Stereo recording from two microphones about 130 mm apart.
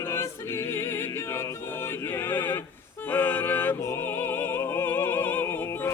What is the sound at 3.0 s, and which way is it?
Opera, 15° left (ahead or behind).